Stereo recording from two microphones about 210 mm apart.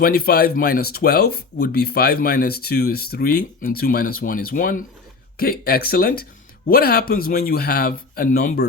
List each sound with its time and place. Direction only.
0.0 s speech: 45° left (ahead or behind)